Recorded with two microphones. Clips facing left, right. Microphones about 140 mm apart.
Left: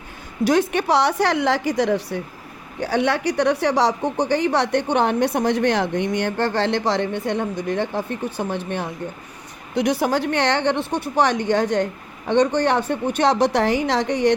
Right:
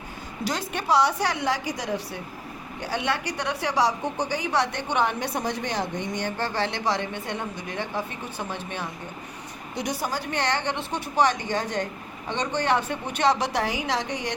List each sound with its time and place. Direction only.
0.4 s a woman's voice: 60° left (ahead or behind)
3.8 s speech: 20° left (ahead or behind)
4.4 s a woman's voice: 55° left (ahead or behind)